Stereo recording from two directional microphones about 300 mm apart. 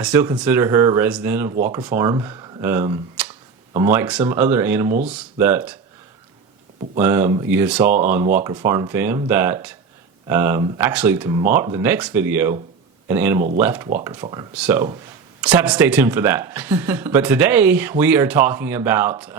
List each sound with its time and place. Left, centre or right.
0.0 s speech: centre
7.0 s speech: centre